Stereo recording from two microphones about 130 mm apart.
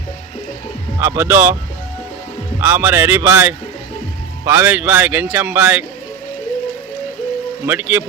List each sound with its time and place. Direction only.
0.9 s speech: 20° right (ahead or behind)
2.6 s speech: 20° right (ahead or behind)
7.7 s speech: 15° right (ahead or behind)